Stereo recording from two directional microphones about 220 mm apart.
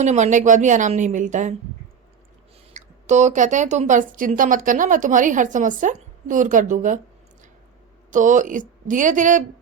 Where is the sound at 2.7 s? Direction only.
30° right (ahead or behind).